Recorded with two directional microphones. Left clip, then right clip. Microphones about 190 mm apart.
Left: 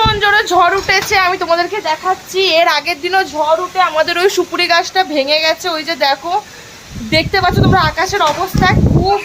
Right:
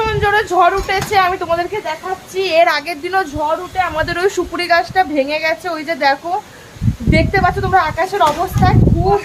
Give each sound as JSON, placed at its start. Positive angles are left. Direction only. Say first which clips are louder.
{"t": 0.0, "sound": "speech", "louder": "left 3 dB", "side_deg": 5}
{"t": 2.3, "sound": "speech", "louder": "even", "side_deg": 5}